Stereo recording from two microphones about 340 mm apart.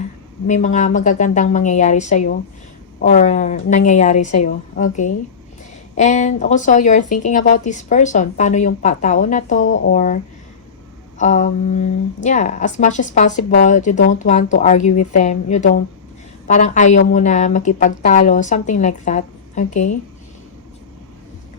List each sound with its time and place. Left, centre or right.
0.4 s speech: left
11.2 s speech: left